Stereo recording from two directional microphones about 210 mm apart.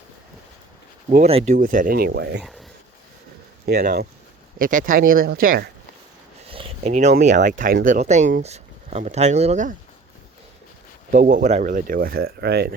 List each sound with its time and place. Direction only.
1.1 s speech: 30° right (ahead or behind); by 2.4 s 50° right (ahead or behind)
2.4 s speech: centre (ahead or behind)
3.8 s speech: 45° right (ahead or behind)
6.5 s a sound: 25° right (ahead or behind)
7.2 s speech: 35° right (ahead or behind)
11.1 s speech: 35° right (ahead or behind)